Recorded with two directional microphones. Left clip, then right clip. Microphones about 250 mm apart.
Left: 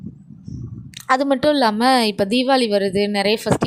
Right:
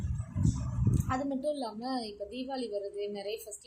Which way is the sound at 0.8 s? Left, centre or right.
Left.